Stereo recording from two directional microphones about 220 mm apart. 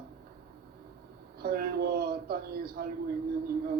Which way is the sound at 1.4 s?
45° right (ahead or behind).